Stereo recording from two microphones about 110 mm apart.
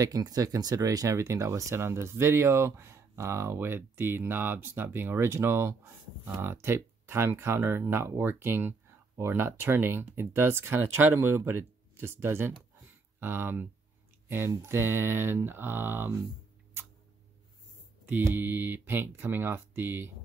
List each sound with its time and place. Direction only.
0.0 s speech: 35° right (ahead or behind); by 16.2 s 20° right (ahead or behind)
18.0 s speech: 15° right (ahead or behind)